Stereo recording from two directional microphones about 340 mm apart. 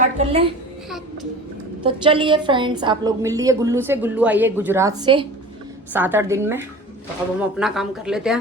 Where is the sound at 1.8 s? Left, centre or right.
Centre.